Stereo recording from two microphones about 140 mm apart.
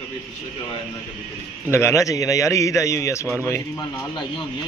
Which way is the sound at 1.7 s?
20° left (ahead or behind).